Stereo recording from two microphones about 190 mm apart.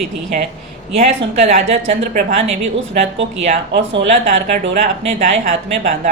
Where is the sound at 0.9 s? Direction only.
35° right (ahead or behind).